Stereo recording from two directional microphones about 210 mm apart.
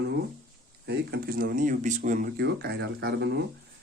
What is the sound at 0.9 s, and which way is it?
Speech, 45° right (ahead or behind).